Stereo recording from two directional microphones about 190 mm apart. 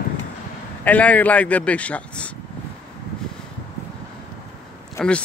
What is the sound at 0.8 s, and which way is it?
A man's voice, 10° left (ahead or behind).